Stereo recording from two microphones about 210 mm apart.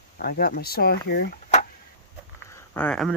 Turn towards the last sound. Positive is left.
turn(degrees=0)  # may be behind; listen again after turning